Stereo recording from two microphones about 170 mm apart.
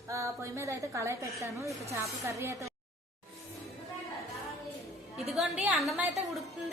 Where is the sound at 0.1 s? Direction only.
15° right (ahead or behind).